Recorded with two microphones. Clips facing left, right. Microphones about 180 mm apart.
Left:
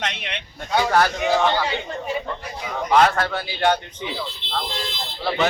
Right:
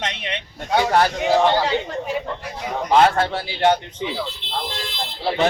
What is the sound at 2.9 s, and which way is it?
Speech, 25° right (ahead or behind).